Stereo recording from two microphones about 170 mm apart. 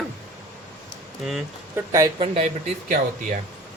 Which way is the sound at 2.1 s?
35° right (ahead or behind).